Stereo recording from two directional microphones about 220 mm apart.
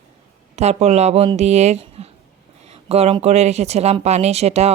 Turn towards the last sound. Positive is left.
turn(degrees=-30)  # may be behind; listen again after turning